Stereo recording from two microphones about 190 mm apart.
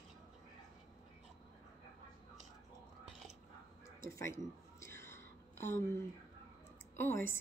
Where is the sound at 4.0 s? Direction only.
15° left (ahead or behind).